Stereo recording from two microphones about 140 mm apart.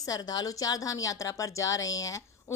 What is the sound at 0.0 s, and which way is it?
A woman's voice, 25° left (ahead or behind).